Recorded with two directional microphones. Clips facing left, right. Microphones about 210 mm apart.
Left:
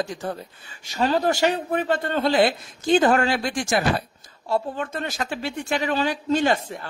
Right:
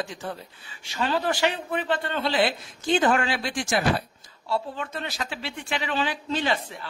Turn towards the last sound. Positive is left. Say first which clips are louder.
# left 5 dB
turn(degrees=45)  # may be behind; listen again after turning